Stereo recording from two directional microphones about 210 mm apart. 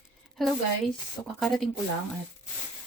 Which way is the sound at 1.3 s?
Centre (ahead or behind).